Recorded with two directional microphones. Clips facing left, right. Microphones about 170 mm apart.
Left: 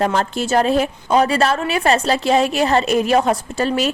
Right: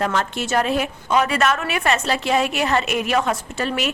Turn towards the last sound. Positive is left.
turn(degrees=35)  # may be behind; listen again after turning